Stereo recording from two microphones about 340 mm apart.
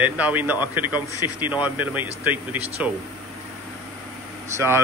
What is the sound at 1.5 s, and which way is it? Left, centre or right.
Speech, centre.